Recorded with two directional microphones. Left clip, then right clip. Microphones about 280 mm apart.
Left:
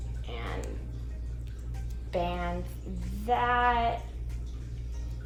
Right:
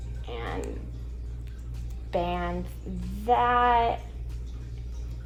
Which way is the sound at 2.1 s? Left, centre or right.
Right.